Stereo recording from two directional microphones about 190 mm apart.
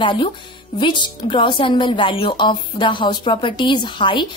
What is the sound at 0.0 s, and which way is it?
Speech, 25° left (ahead or behind).